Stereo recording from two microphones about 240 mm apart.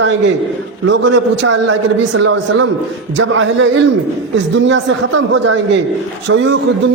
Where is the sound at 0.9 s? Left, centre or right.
Right.